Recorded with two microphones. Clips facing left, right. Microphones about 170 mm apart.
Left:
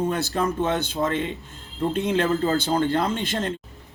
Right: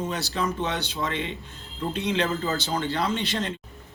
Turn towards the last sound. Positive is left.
turn(degrees=50)  # may be behind; listen again after turning